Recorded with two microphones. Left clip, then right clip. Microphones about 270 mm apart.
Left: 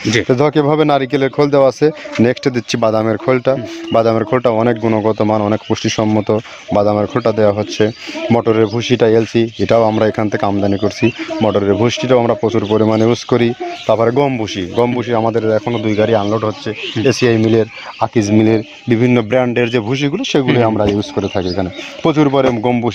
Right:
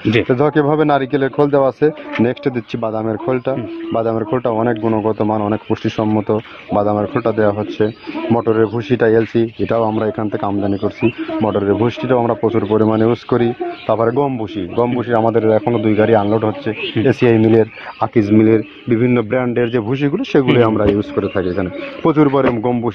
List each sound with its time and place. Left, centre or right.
0.3 s speech: left